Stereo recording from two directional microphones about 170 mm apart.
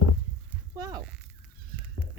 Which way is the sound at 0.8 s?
25° right (ahead or behind).